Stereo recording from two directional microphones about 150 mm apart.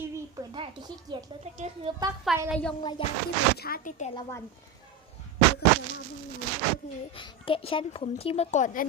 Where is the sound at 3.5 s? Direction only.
80° left.